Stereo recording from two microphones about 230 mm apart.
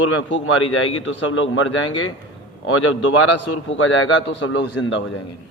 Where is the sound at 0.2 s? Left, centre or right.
Left.